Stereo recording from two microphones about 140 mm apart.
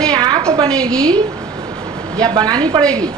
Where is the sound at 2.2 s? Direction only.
30° right (ahead or behind).